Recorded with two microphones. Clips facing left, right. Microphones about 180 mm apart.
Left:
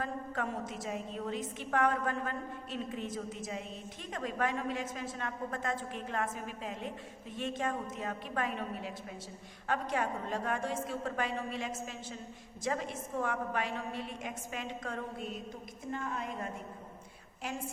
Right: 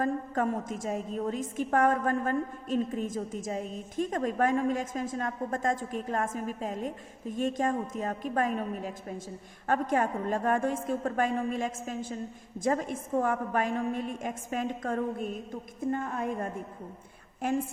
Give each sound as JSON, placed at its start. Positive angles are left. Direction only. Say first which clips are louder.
{"t": 0.0, "sound": "a woman's voice", "louder": "right 8 dB", "side_deg": -45}